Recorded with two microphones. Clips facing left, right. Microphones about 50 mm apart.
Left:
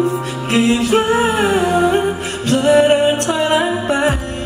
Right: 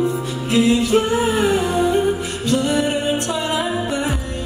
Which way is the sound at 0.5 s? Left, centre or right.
Left.